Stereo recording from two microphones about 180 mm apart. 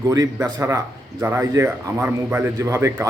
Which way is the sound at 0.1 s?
20° right (ahead or behind).